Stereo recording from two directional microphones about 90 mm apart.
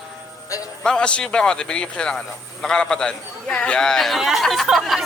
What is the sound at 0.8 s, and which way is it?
A man's voice, 10° left (ahead or behind).